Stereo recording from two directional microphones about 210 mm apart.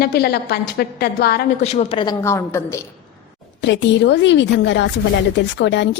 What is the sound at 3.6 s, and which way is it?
Speech, 60° left (ahead or behind).